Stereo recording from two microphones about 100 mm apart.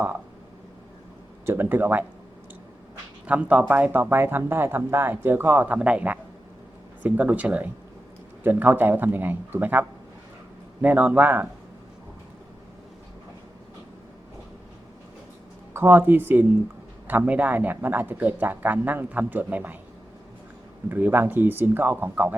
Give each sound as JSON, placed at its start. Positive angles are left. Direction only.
{"t": 1.5, "sound": "speech", "side_deg": -20}
{"t": 3.2, "sound": "speech", "side_deg": -15}
{"t": 15.7, "sound": "speech", "side_deg": -20}
{"t": 20.9, "sound": "speech", "side_deg": -20}